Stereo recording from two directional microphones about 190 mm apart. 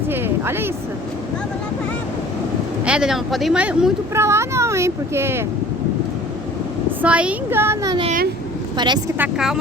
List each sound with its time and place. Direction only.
0.1 s a sound: 10° right (ahead or behind)
2.8 s speech: 5° right (ahead or behind)
7.0 s speech: 5° right (ahead or behind); by 8.9 s 25° right (ahead or behind)
9.1 s speech: 5° right (ahead or behind)